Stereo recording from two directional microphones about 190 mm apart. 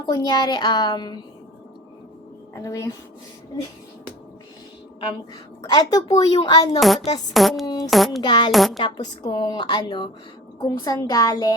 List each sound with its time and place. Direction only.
0.0 s a woman's voice: 20° left (ahead or behind)
2.6 s speech: 15° left (ahead or behind)
5.6 s a woman's voice: 20° left (ahead or behind)
6.7 s a sound: centre (ahead or behind)
7.6 s a woman's voice: 20° left (ahead or behind)
7.9 s a sound: centre (ahead or behind)
8.2 s a woman's voice: 25° left (ahead or behind)
8.5 s a sound: centre (ahead or behind)
8.8 s a woman's voice: 20° left (ahead or behind)